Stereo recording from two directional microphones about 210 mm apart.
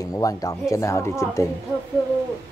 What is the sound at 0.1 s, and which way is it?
Speech, 15° left (ahead or behind).